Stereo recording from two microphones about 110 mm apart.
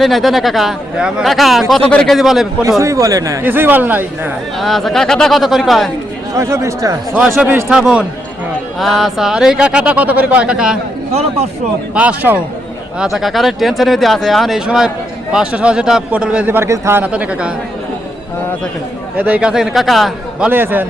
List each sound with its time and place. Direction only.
0.0 s a man's voice: centre (ahead or behind)
2.1 s speech: 5° right (ahead or behind)
2.6 s a man's voice: 30° right (ahead or behind)
3.4 s speech: 20° right (ahead or behind)
4.5 s speech: centre (ahead or behind)
6.3 s a man's voice: 25° right (ahead or behind)
7.7 s speech: 10° right (ahead or behind)
11.1 s a man's voice: 70° right (ahead or behind)
11.9 s speech: 15° right (ahead or behind)
13.0 s speech: 5° right (ahead or behind); by 17.1 s 20° right (ahead or behind)
17.1 s speech: 10° right (ahead or behind)
19.1 s speech: 15° right (ahead or behind)
20.5 s a man's voice: 20° right (ahead or behind)